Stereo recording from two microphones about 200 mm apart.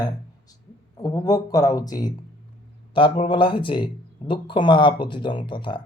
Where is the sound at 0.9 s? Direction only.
20° left (ahead or behind).